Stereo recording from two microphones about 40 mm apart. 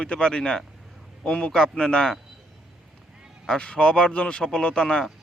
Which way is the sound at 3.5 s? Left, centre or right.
Left.